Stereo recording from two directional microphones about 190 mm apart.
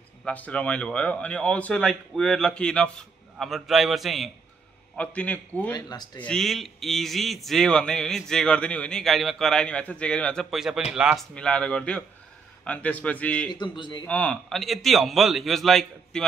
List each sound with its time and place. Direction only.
0.2 s a man's voice: 5° left (ahead or behind)
5.7 s speech: 20° left (ahead or behind)
6.2 s a man's voice: centre (ahead or behind)
13.5 s speech: 25° left (ahead or behind)
14.0 s speech: 5° left (ahead or behind)